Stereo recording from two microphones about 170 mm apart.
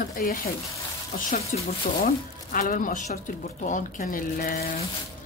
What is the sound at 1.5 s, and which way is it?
Speech, 50° left (ahead or behind).